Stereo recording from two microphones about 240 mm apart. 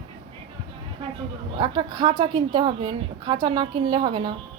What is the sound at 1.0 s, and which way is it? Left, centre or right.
A woman's voice, right.